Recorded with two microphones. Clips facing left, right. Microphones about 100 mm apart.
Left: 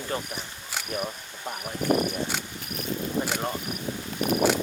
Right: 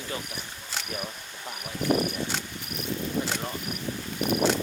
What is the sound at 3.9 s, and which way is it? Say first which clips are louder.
Cricket: left 1 dB; 20° left (ahead or behind).